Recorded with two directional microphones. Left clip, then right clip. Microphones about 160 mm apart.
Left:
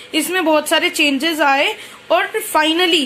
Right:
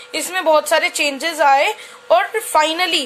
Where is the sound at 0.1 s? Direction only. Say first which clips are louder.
Even; 30° right (ahead or behind).